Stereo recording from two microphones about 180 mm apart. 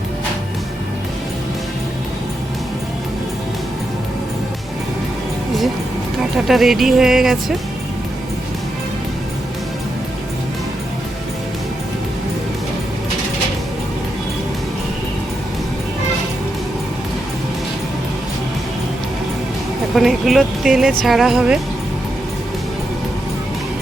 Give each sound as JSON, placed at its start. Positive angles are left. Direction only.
{"t": 6.3, "sound": "speech", "side_deg": 0}
{"t": 20.0, "sound": "speech", "side_deg": 0}